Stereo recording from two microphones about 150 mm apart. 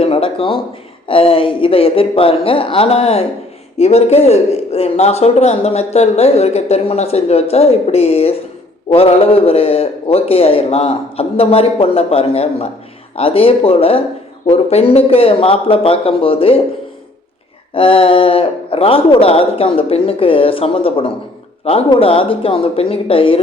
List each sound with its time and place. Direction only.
0.0 s a man's voice: 40° left (ahead or behind)
17.7 s a man's voice: 40° left (ahead or behind)